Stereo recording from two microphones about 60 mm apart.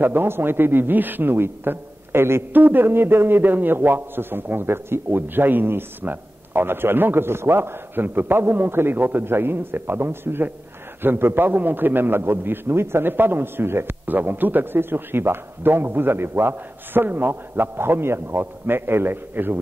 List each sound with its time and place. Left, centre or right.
0.0 s a man's voice: right
2.5 s a man's voice: right